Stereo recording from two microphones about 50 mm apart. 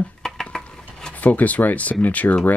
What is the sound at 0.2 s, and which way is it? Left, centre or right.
Dishes, centre.